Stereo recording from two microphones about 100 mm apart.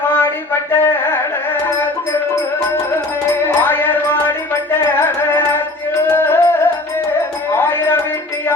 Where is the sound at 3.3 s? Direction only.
20° left (ahead or behind).